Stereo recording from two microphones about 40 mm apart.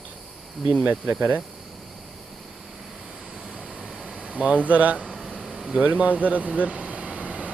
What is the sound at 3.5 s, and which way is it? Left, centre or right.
Air conditioning, centre.